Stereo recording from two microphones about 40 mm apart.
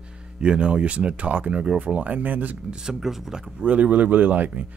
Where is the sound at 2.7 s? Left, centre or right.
Centre.